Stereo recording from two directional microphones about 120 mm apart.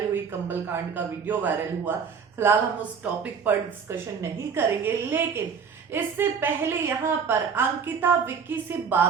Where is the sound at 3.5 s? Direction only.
15° right (ahead or behind).